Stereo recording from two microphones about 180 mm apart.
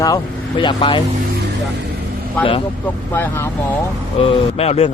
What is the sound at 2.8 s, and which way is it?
Speech, 10° left (ahead or behind).